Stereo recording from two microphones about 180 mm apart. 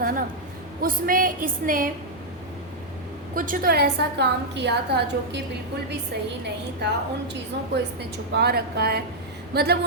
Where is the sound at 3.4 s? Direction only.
55° right (ahead or behind); by 5.4 s 70° right (ahead or behind).